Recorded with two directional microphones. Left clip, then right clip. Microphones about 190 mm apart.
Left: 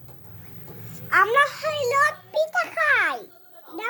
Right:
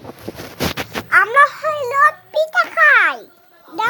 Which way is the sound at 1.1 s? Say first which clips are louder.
Right 7 dB; 5° right (ahead or behind).